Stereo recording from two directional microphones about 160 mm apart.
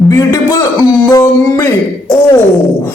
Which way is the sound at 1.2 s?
20° left (ahead or behind).